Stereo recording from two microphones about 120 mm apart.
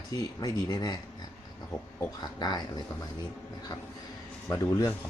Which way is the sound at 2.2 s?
35° left (ahead or behind).